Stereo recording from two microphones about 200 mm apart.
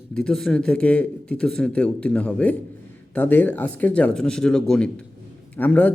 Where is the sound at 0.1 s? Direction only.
5° left (ahead or behind).